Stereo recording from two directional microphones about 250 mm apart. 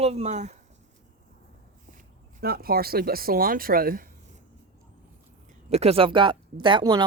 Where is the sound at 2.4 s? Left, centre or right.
Right.